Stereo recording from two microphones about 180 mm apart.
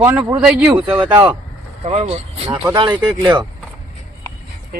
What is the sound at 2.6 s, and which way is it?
Speech, 25° right (ahead or behind).